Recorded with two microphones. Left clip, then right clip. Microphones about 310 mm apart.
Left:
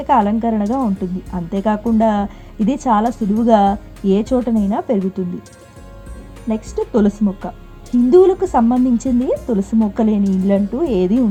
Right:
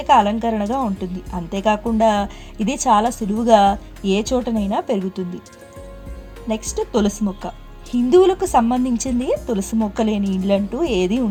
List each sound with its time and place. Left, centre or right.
0.0 s speech: right
6.5 s speech: right